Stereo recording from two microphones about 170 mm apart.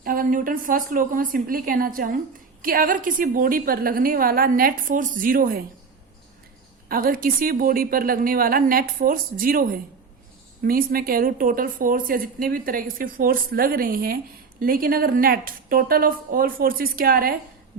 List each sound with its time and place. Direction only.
0.0 s a woman's voice: 55° right (ahead or behind)
6.8 s a woman's voice: 60° right (ahead or behind)